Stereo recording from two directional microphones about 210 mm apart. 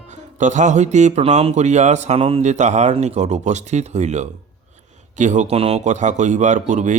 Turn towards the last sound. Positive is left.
turn(degrees=-35)  # may be behind; listen again after turning